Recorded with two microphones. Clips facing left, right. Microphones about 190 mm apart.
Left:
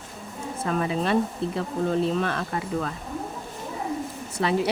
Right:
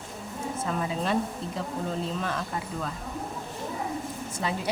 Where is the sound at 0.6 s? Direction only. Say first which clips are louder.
Left 5 dB; 70° left (ahead or behind).